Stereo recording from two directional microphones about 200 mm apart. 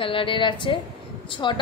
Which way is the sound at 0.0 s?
25° left (ahead or behind).